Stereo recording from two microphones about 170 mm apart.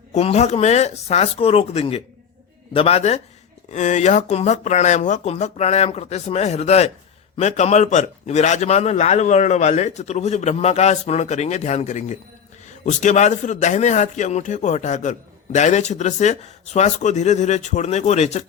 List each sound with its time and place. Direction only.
0.1 s a man's voice: 40° left (ahead or behind)